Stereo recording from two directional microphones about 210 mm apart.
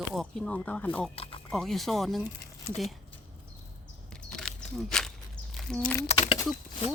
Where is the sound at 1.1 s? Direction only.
25° left (ahead or behind).